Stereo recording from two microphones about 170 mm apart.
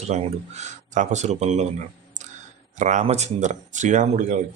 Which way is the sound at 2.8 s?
45° right (ahead or behind).